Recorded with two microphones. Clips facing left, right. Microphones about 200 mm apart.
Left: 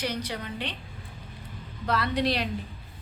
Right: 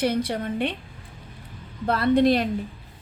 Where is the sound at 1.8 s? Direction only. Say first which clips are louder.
Right 8 dB; 50° right (ahead or behind).